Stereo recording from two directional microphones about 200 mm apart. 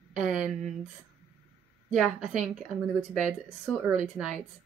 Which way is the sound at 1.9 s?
Centre (ahead or behind).